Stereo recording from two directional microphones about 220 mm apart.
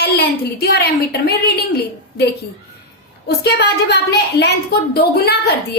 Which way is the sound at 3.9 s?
50° left (ahead or behind).